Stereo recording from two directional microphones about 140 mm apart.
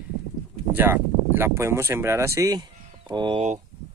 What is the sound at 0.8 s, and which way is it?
Speech, 15° right (ahead or behind).